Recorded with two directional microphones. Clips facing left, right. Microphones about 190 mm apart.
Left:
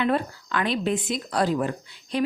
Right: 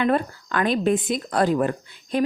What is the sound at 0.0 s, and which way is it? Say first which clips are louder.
A woman's voice: right 3 dB; 45° right (ahead or behind).